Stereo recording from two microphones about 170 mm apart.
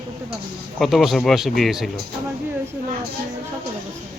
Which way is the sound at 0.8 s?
Centre (ahead or behind).